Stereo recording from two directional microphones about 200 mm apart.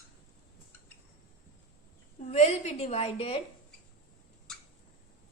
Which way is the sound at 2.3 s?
35° left (ahead or behind).